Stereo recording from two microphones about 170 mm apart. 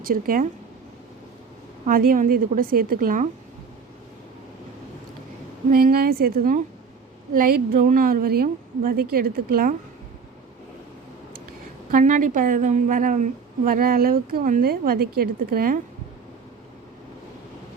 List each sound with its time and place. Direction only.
0.0 s a woman's voice: 55° right (ahead or behind)
1.9 s a woman's voice: 60° right (ahead or behind)
5.7 s a woman's voice: 60° right (ahead or behind)
11.9 s a woman's voice: 50° right (ahead or behind)